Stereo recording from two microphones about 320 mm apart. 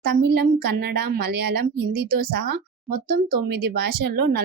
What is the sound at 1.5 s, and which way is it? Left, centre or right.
A woman's voice, right.